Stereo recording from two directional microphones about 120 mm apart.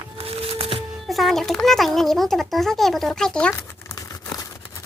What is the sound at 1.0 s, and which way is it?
A child's voice, centre (ahead or behind).